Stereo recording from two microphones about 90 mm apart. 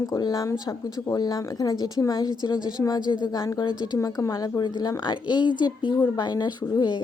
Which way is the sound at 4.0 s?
40° left (ahead or behind).